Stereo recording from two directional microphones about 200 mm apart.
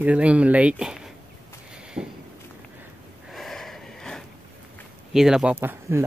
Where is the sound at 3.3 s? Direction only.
Centre (ahead or behind).